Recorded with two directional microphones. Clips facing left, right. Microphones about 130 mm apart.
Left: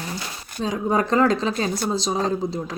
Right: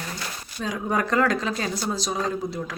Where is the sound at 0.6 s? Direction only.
30° left (ahead or behind).